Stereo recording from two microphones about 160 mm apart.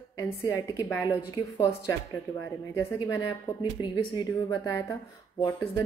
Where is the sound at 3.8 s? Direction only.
25° left (ahead or behind).